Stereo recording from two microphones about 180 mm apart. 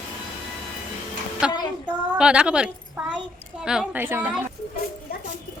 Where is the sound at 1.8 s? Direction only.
5° right (ahead or behind).